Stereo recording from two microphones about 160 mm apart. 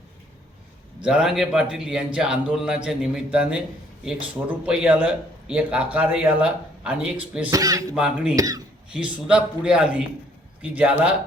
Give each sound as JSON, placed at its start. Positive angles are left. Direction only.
{"t": 1.0, "sound": "a man's voice", "side_deg": -5}
{"t": 7.5, "sound": "speech", "side_deg": -20}
{"t": 7.9, "sound": "a man's voice", "side_deg": -5}
{"t": 8.4, "sound": "speech", "side_deg": -20}
{"t": 8.9, "sound": "a man's voice", "side_deg": -5}